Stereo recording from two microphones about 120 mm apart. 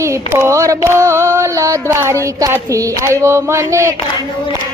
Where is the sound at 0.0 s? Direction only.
20° right (ahead or behind).